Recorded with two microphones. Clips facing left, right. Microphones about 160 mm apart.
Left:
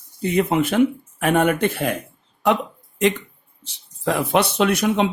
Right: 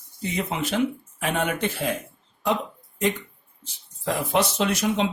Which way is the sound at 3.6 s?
65° left (ahead or behind).